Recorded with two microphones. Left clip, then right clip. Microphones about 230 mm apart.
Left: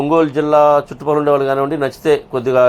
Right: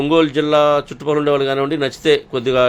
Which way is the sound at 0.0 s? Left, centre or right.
Right.